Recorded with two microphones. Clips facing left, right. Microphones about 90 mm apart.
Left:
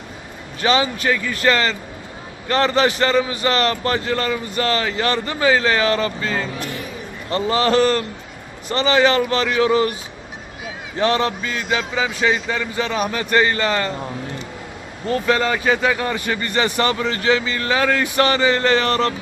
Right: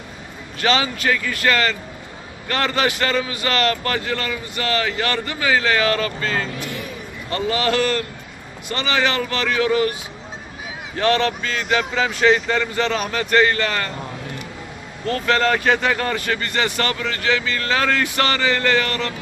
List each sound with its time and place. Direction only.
0.6 s speech: 20° left (ahead or behind)
7.3 s speech: 30° left (ahead or behind)
10.9 s speech: 20° left (ahead or behind)
15.0 s speech: 15° left (ahead or behind)